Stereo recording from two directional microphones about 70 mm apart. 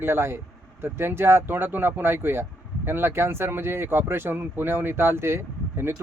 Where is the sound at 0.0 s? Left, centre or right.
Right.